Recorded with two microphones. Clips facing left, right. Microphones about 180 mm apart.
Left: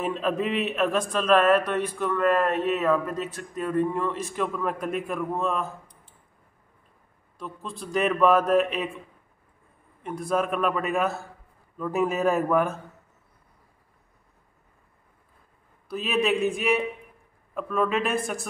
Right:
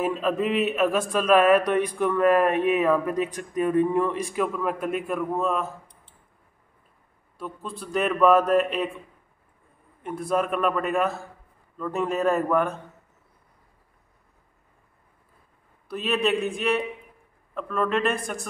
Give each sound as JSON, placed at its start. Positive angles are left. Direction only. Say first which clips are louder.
{"t": 0.0, "sound": "a man's voice", "louder": "right 2 dB", "side_deg": 0}
{"t": 7.3, "sound": "a man's voice", "louder": "right 2 dB", "side_deg": -5}
{"t": 10.0, "sound": "a man's voice", "louder": "right 1 dB", "side_deg": 0}
{"t": 15.9, "sound": "a man's voice", "louder": "even", "side_deg": 0}